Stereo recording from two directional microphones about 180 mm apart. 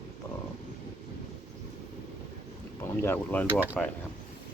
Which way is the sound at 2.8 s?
15° left (ahead or behind).